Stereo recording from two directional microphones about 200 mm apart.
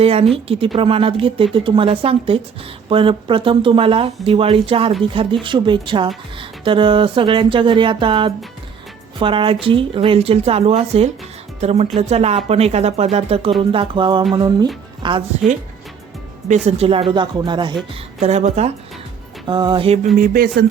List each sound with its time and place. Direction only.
0.0 s speech: 30° right (ahead or behind)
16.6 s speech: 30° right (ahead or behind)
18.2 s speech: 35° right (ahead or behind)
19.5 s speech: 20° right (ahead or behind)
20.1 s speech: 45° right (ahead or behind)